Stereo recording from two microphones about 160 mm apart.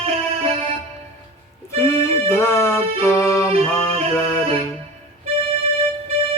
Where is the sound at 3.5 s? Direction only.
40° right (ahead or behind).